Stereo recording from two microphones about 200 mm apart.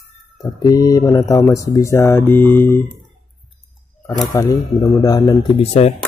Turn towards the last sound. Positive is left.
turn(degrees=30)  # may be behind; listen again after turning